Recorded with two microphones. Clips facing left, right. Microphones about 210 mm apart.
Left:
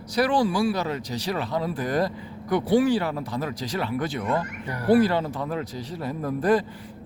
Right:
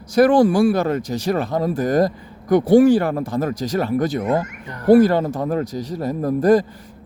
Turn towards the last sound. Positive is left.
turn(degrees=-40)  # may be behind; listen again after turning